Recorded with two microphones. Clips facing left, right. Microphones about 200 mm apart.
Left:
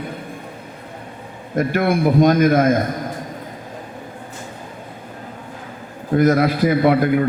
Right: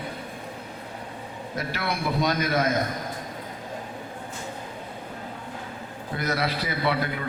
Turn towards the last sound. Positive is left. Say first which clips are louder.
# left 12 dB
turn(degrees=50)  # may be behind; listen again after turning